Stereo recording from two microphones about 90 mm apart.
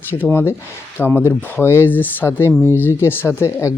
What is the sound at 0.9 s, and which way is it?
Speech, 25° left (ahead or behind).